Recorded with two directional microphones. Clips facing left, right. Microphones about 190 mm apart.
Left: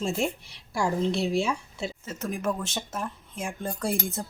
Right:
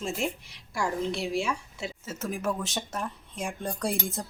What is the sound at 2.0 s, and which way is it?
A woman's voice, 5° right (ahead or behind).